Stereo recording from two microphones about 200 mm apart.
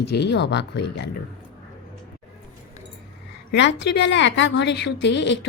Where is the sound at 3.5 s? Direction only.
60° left (ahead or behind).